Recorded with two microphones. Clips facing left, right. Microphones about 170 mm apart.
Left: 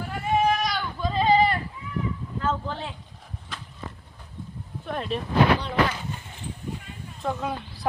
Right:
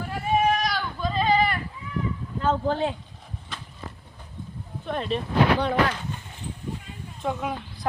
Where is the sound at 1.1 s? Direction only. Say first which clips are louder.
Left 2 dB; 25° left (ahead or behind).